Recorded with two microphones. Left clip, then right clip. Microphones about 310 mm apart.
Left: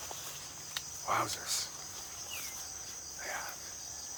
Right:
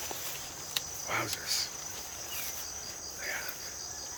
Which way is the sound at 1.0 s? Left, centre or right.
Centre.